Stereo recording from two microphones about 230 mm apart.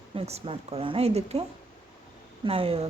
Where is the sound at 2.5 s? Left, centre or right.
Right.